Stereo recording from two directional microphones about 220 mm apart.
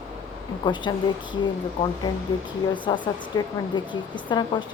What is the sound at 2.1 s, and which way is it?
A woman's voice, 15° left (ahead or behind).